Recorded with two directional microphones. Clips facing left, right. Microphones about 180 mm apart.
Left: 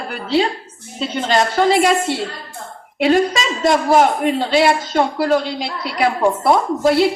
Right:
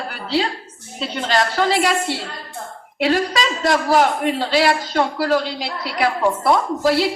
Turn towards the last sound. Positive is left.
turn(degrees=20)  # may be behind; listen again after turning